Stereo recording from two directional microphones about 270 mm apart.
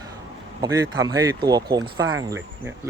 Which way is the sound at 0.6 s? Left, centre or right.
Centre.